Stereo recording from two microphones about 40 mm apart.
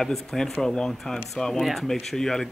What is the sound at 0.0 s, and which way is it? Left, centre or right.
Speech, centre.